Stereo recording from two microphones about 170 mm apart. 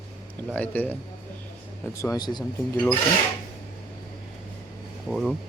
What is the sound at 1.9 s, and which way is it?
Speech, 20° left (ahead or behind).